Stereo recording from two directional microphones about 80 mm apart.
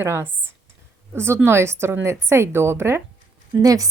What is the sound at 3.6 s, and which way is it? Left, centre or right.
Speech, right.